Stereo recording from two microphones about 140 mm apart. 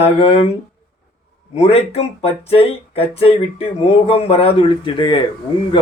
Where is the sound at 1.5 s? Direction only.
45° left (ahead or behind).